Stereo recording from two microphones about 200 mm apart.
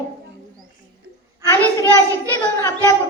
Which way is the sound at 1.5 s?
15° left (ahead or behind).